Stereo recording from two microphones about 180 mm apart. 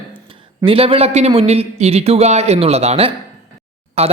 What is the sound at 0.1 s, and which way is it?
Speech, 30° right (ahead or behind).